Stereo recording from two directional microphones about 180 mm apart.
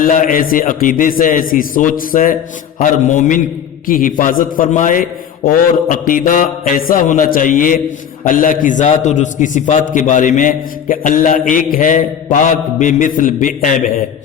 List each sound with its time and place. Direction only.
0.0 s mantra: 50° left (ahead or behind)